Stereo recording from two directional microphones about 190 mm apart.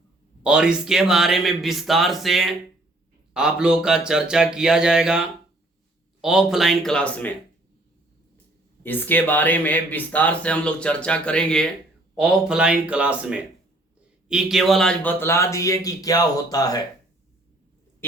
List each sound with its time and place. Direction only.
0.4 s speech: 5° right (ahead or behind)
8.8 s speech: 10° left (ahead or behind)